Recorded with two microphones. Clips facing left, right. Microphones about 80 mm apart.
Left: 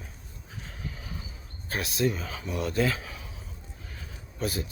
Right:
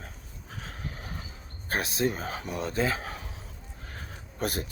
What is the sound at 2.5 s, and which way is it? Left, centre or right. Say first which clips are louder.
Speech: left 2 dB; right.